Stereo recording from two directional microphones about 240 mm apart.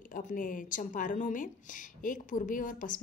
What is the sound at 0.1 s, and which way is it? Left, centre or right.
Speech, left.